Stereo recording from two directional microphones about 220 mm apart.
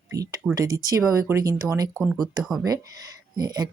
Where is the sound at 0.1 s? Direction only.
15° right (ahead or behind).